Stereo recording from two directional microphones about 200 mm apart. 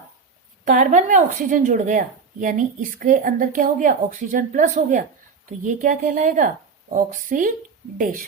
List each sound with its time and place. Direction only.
0.6 s a woman's voice: 40° right (ahead or behind)